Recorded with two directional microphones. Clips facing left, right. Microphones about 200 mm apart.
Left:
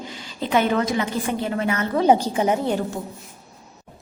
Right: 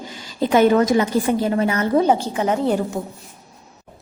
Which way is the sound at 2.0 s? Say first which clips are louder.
Left 1 dB; 15° left (ahead or behind).